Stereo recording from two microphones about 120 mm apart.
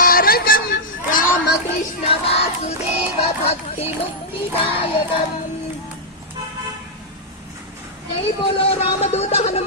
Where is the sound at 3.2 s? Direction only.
60° left (ahead or behind).